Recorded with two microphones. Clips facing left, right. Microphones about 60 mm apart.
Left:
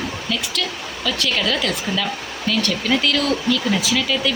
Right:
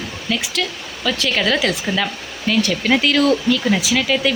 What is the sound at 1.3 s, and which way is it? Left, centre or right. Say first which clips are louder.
Speech: right 3 dB; right.